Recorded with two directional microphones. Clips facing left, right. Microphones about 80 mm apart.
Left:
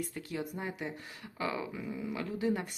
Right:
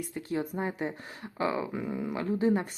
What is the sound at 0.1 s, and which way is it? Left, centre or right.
Speech, right.